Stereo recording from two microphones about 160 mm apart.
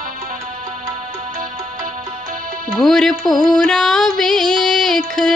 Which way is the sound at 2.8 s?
Centre (ahead or behind).